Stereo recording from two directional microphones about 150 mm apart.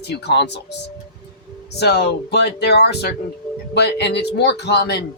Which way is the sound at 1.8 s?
90° left.